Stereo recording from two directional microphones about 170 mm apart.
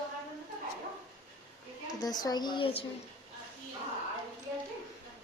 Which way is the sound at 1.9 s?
25° left (ahead or behind).